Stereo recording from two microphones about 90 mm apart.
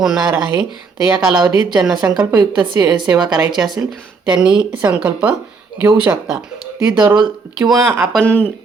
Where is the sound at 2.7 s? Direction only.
45° right (ahead or behind).